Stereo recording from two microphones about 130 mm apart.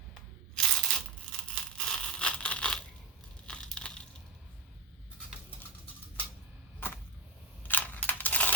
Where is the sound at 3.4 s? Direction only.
5° left (ahead or behind).